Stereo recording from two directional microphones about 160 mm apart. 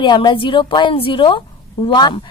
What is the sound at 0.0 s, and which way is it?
A woman's voice, 25° left (ahead or behind).